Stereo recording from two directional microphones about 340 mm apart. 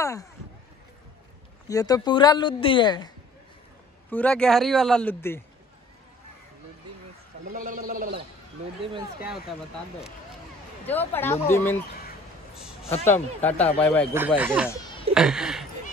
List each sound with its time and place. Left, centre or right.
0.0 s speech: centre
1.7 s speech: centre
4.1 s speech: centre
7.5 s a man's voice: right
8.9 s speech: centre
10.9 s speech: centre
13.0 s speech: centre